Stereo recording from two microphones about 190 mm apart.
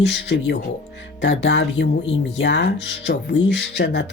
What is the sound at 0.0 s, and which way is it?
Speech, 70° left (ahead or behind).